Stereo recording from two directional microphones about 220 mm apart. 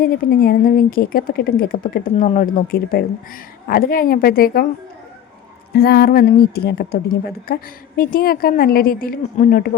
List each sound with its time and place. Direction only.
0.0 s a woman's voice: 40° left (ahead or behind)
5.7 s a woman's voice: 45° left (ahead or behind)